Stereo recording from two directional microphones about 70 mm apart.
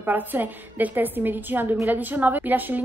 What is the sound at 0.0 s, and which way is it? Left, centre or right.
A woman's voice, right.